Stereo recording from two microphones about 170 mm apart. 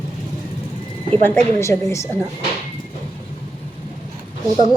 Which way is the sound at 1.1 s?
15° left (ahead or behind).